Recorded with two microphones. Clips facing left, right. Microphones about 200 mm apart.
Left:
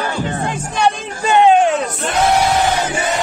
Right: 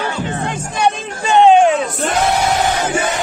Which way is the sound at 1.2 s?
Centre (ahead or behind).